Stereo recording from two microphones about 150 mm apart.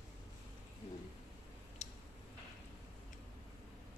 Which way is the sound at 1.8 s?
45° left (ahead or behind).